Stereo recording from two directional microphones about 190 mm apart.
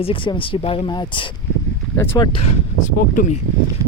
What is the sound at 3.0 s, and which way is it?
Speech, 45° left (ahead or behind).